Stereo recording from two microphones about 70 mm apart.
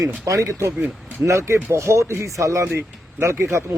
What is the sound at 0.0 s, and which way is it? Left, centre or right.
Speech, right.